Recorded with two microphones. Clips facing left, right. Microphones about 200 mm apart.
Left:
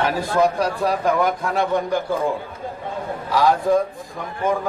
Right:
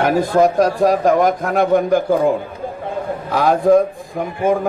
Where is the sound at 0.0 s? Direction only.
45° right (ahead or behind).